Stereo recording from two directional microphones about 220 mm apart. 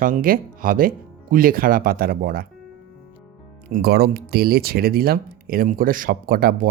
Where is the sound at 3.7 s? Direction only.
45° right (ahead or behind).